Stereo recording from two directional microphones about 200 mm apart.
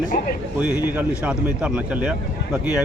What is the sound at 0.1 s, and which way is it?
Speech, 45° left (ahead or behind).